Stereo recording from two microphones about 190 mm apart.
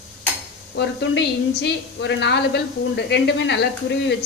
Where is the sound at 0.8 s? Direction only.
65° left (ahead or behind).